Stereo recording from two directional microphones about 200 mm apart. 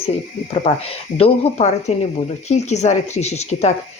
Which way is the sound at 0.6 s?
30° left (ahead or behind).